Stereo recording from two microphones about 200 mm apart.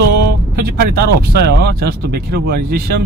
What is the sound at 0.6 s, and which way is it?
Speech, 50° right (ahead or behind).